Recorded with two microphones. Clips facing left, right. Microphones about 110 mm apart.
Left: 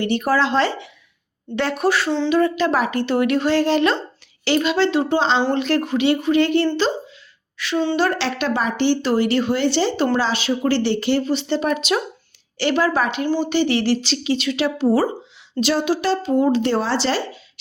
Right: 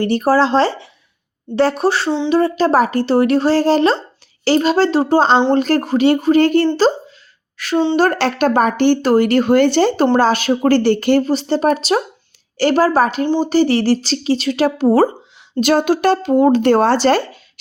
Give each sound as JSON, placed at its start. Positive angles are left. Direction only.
{"t": 0.0, "sound": "speech", "side_deg": -40}
{"t": 7.5, "sound": "a sound", "side_deg": -45}
{"t": 7.9, "sound": "speech", "side_deg": -45}